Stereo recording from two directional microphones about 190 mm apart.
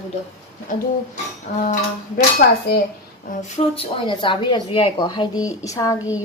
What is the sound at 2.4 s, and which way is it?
Dishes, 55° left (ahead or behind).